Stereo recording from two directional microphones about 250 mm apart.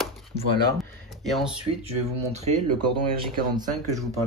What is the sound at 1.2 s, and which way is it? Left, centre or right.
Speech, centre.